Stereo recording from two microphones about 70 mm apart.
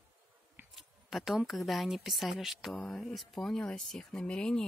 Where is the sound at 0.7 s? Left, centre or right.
Centre.